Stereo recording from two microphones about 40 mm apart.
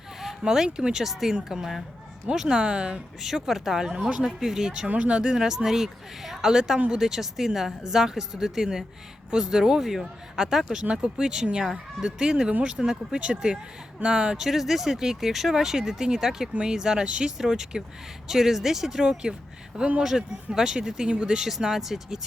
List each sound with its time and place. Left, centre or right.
0.2 s speech: centre
2.6 s speech: right
3.2 s speech: centre
4.9 s speech: right; by 6.7 s centre
6.7 s speech: right
7.0 s speech: centre
14.3 s speech: centre
21.4 s speech: centre